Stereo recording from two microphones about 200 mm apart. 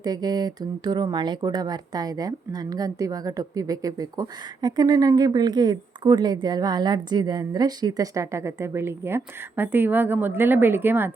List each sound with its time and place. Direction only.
0.0 s speech: 20° right (ahead or behind)